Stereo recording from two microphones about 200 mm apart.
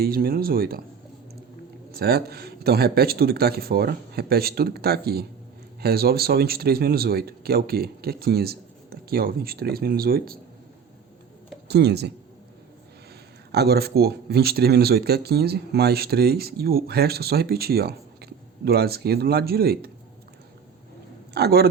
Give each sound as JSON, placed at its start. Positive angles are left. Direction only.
{"t": 0.0, "sound": "speech", "side_deg": -50}
{"t": 2.0, "sound": "speech", "side_deg": -50}
{"t": 11.7, "sound": "speech", "side_deg": -55}
{"t": 13.5, "sound": "speech", "side_deg": -55}
{"t": 21.3, "sound": "speech", "side_deg": -50}